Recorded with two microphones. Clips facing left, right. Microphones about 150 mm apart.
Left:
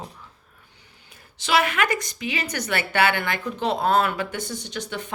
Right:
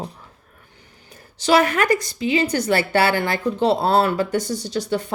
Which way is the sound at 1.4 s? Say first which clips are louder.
Right 5 dB; 40° right (ahead or behind).